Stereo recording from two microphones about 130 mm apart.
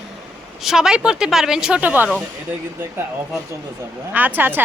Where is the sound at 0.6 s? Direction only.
5° right (ahead or behind).